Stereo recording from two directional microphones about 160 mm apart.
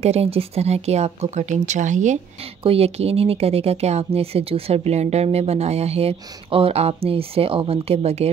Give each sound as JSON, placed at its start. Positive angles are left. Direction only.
{"t": 0.0, "sound": "speech", "side_deg": -40}
{"t": 2.6, "sound": "speech", "side_deg": -40}